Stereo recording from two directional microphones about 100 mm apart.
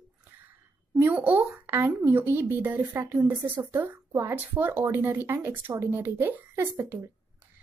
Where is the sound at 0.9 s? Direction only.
15° right (ahead or behind); by 7.0 s 30° right (ahead or behind).